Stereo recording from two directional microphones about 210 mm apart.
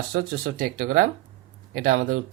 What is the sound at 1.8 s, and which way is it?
Speech, 70° right (ahead or behind).